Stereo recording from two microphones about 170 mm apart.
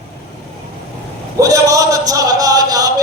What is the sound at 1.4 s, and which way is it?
A man's voice, 20° right (ahead or behind).